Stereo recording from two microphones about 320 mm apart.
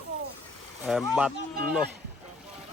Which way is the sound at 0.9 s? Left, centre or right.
Centre.